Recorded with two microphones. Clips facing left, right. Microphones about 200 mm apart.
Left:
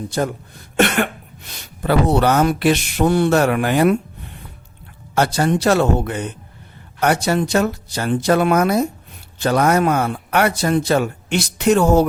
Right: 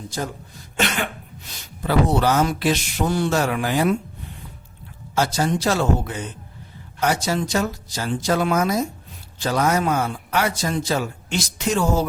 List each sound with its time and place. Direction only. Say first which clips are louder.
0.1 s speech: left 7 dB; 65° left (ahead or behind)
5.1 s speech: left 4 dB; 60° left (ahead or behind)